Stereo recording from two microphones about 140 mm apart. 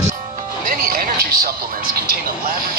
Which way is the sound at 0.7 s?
90° right.